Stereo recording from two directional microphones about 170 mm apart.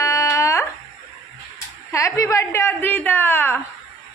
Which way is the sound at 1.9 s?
20° left (ahead or behind).